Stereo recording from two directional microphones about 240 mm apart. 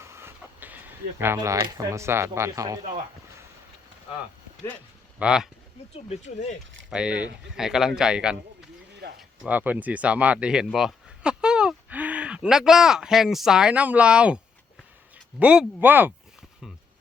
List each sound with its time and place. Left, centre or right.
0.0 s speech: centre
5.2 s a man's voice: centre
6.1 s speech: left
6.9 s a man's voice: centre